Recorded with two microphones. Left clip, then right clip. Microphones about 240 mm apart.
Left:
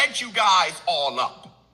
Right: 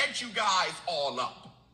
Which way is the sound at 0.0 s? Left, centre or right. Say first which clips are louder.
Left 8 dB; centre.